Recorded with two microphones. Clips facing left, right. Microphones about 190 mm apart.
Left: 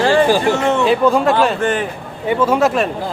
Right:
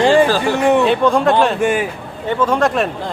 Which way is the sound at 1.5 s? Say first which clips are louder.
Right 2 dB; 10° right (ahead or behind).